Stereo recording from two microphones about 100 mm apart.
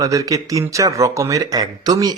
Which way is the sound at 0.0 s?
35° right (ahead or behind).